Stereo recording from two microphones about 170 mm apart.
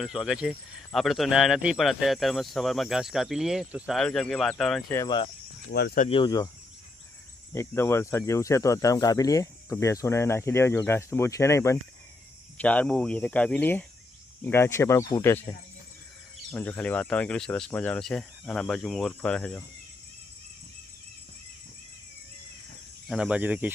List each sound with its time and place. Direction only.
0.0 s speech: 5° right (ahead or behind)
4.9 s speech: 15° left (ahead or behind)
5.7 s speech: 70° left (ahead or behind)
6.1 s speech: 25° left (ahead or behind)
7.5 s speech: 15° left (ahead or behind)
16.5 s speech: 5° left (ahead or behind)
23.0 s speech: 5° right (ahead or behind)